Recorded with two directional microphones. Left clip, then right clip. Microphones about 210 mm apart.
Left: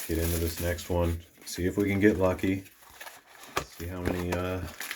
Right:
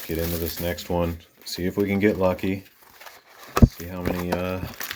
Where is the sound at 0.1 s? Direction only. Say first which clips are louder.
Right 3 dB; 40° right (ahead or behind).